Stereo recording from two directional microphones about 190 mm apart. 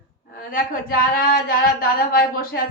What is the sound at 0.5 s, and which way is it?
Speech, 50° left (ahead or behind).